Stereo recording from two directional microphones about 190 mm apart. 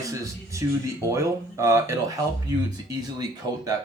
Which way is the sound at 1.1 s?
15° right (ahead or behind).